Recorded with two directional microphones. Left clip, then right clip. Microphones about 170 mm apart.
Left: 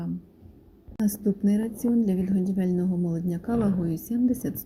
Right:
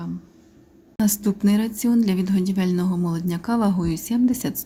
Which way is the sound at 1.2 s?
20° right (ahead or behind).